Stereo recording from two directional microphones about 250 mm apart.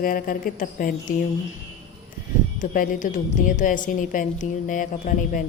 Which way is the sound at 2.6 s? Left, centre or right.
Left.